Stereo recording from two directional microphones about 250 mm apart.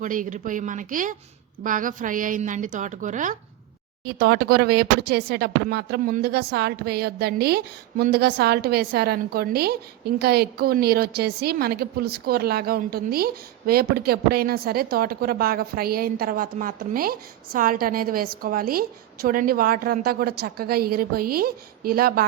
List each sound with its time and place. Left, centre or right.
0.0 s a woman's voice: right